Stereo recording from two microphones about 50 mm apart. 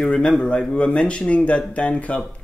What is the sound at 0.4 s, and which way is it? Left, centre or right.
Speech, left.